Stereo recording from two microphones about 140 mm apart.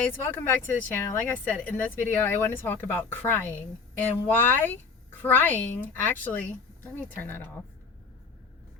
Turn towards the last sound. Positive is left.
turn(degrees=15)  # may be behind; listen again after turning